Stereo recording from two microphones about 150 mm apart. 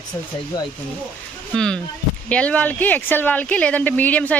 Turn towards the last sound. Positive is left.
turn(degrees=10)  # may be behind; listen again after turning